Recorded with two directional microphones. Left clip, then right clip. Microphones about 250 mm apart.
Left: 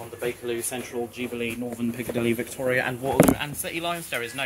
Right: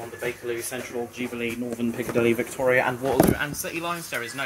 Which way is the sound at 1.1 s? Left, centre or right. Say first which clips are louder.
Even; centre.